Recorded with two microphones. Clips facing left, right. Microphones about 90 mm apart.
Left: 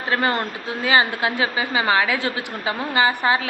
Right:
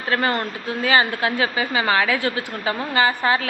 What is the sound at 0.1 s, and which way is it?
A woman's voice, 20° left (ahead or behind).